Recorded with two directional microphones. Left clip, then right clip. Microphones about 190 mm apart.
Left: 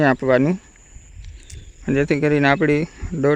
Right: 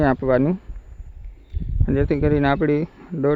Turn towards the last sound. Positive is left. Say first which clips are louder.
# left 2 dB
turn(degrees=15)  # may be behind; listen again after turning